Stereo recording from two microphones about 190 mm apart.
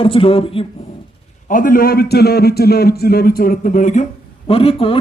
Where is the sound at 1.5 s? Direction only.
45° left (ahead or behind).